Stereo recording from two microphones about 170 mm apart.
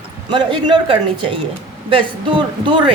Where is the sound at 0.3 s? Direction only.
30° right (ahead or behind).